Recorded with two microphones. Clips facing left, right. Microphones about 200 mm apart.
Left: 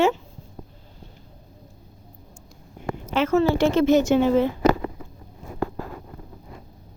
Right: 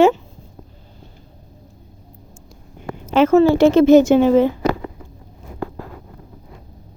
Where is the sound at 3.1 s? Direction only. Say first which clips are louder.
Right 8 dB; 90° right.